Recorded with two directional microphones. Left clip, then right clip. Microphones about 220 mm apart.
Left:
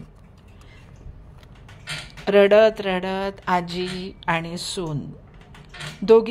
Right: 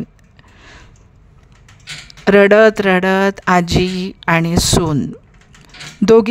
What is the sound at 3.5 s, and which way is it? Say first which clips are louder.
A woman's voice: right 5 dB; 90° right.